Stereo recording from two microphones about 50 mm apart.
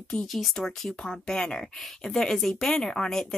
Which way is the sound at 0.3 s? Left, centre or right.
Centre.